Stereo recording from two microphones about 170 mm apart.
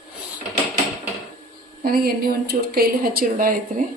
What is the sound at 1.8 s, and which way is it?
Speech, 60° right (ahead or behind).